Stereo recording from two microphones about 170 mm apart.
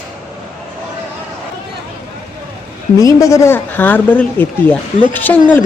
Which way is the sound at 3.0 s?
20° left (ahead or behind).